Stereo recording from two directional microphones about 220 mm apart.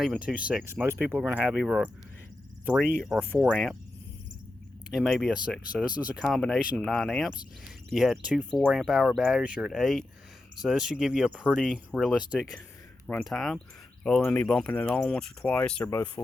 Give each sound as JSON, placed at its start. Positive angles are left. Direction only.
{"t": 0.0, "sound": "speech", "side_deg": 0}
{"t": 4.9, "sound": "speech", "side_deg": 0}